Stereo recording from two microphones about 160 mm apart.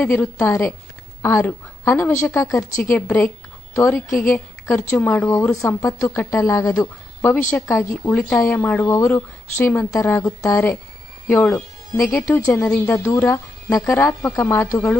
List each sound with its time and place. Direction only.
0.0 s a woman's voice: 10° left (ahead or behind)